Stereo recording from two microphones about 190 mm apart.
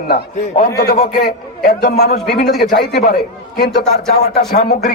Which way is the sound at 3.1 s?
40° left (ahead or behind).